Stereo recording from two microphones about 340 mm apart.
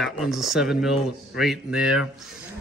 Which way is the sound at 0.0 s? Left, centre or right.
Centre.